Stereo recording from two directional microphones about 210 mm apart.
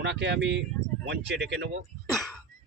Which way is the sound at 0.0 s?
55° right (ahead or behind).